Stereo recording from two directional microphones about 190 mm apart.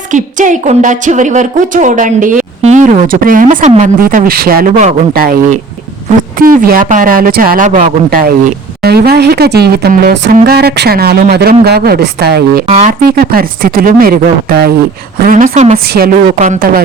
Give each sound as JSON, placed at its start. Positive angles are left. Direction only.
{"t": 0.1, "sound": "a woman's voice", "side_deg": -40}
{"t": 6.4, "sound": "speech", "side_deg": -45}
{"t": 12.6, "sound": "a woman's voice", "side_deg": -40}